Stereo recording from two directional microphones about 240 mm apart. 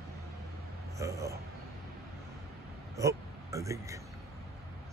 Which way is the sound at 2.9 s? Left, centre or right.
Centre.